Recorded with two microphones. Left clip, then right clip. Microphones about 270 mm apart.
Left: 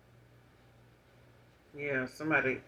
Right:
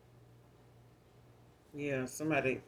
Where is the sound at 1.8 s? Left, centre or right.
Right.